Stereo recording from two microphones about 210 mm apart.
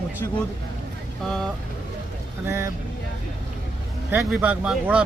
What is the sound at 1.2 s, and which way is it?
Speech, centre (ahead or behind).